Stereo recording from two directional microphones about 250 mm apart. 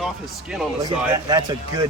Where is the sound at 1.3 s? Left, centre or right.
Centre.